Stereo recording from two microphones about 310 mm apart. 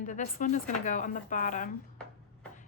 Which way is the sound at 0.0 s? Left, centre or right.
Left.